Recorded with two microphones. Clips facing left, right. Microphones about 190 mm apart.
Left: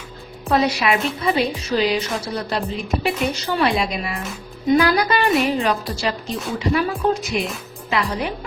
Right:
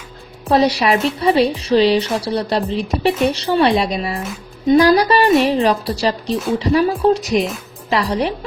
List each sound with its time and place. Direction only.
0.4 s a woman's voice: 35° right (ahead or behind)